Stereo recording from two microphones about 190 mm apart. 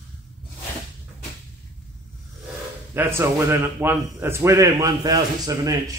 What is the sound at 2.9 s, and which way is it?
A man's voice, 10° right (ahead or behind).